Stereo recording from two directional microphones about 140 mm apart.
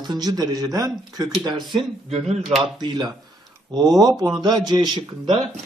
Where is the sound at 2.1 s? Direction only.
50° right (ahead or behind).